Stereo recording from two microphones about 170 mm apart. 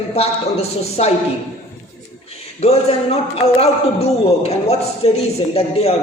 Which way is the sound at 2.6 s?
35° left (ahead or behind).